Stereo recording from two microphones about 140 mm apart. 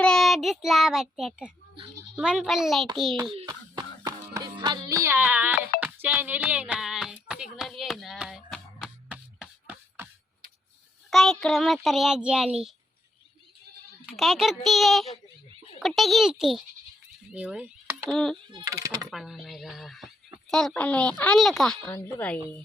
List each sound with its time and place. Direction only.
0.0 s child singing: 5° left (ahead or behind)
2.1 s a child's voice: 5° right (ahead or behind)
3.4 s music: 30° right (ahead or behind); by 5.5 s 10° right (ahead or behind)
5.8 s a sound: 10° right (ahead or behind)
11.1 s a child's voice: centre (ahead or behind)
14.2 s a child's voice: centre (ahead or behind)
18.1 s a child's voice: 5° left (ahead or behind)
18.6 s speech: 25° right (ahead or behind)
19.1 s speech: centre (ahead or behind)
21.9 s speech: 10° left (ahead or behind)